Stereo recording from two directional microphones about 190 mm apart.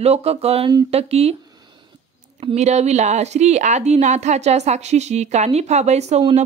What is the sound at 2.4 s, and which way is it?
A woman's voice, 35° right (ahead or behind).